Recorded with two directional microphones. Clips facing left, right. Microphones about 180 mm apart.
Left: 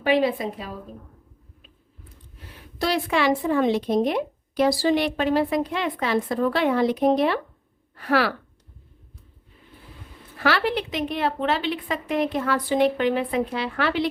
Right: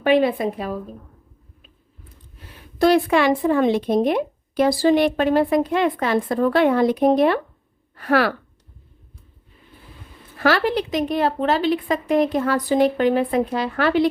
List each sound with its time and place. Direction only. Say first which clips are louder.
0.0 s speech: right 4 dB; 55° right (ahead or behind)
2.7 s speech: right 7 dB; 50° right (ahead or behind)
10.3 s a woman's voice: right 4 dB; 45° right (ahead or behind)